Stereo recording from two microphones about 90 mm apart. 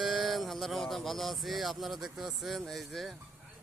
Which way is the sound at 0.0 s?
Centre (ahead or behind).